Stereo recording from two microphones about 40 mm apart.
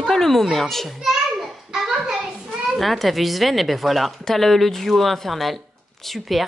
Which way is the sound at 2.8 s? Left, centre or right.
Centre.